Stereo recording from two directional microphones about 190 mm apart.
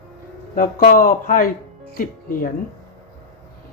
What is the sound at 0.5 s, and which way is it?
Speech, 45° left (ahead or behind).